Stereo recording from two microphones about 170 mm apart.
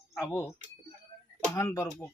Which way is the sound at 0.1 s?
15° left (ahead or behind).